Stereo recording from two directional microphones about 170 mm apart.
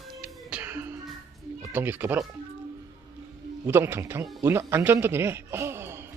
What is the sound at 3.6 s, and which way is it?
A man's voice, 15° right (ahead or behind).